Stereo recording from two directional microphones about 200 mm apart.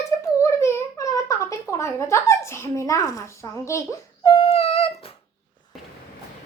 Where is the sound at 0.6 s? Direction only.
15° left (ahead or behind); by 4.9 s 30° left (ahead or behind).